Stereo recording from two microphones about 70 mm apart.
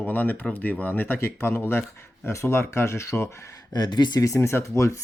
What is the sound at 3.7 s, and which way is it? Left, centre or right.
Speech, left.